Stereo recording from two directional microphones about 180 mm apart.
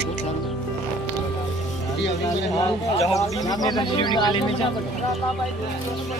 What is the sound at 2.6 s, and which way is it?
Speech, 20° left (ahead or behind).